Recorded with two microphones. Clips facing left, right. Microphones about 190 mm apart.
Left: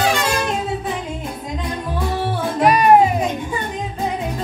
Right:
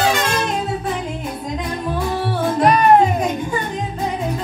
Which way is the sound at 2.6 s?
10° left (ahead or behind).